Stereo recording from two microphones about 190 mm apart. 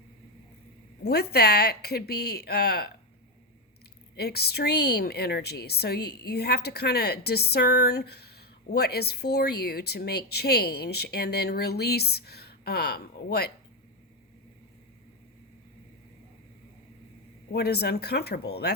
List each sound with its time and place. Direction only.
1.0 s a woman's voice: 55° left (ahead or behind)
4.2 s a woman's voice: 55° left (ahead or behind)
17.5 s a woman's voice: 55° left (ahead or behind)